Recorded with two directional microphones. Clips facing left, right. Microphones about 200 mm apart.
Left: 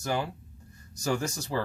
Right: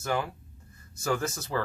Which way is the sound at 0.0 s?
30° left (ahead or behind).